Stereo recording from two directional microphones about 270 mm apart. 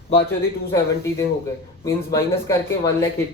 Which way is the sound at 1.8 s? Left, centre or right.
Centre.